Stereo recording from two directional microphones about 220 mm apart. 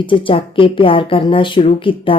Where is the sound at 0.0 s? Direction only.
20° left (ahead or behind).